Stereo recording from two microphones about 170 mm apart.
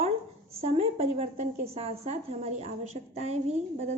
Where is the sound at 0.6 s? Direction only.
35° right (ahead or behind).